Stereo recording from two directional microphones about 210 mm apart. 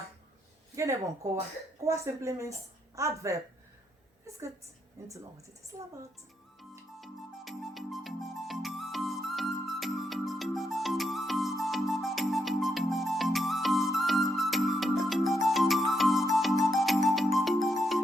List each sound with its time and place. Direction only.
0.8 s speech: 15° right (ahead or behind)
7.0 s music: centre (ahead or behind)